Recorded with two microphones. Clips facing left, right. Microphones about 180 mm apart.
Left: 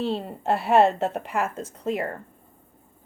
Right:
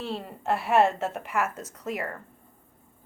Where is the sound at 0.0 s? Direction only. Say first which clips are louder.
Left 6 dB; 30° left (ahead or behind).